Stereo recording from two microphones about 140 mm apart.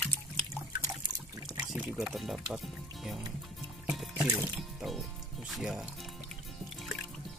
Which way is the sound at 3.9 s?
5° right (ahead or behind).